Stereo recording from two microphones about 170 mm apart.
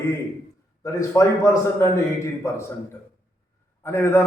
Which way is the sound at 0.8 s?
20° left (ahead or behind).